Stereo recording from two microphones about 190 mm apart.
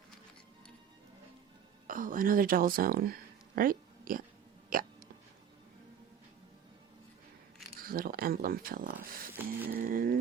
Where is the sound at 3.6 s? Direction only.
45° right (ahead or behind).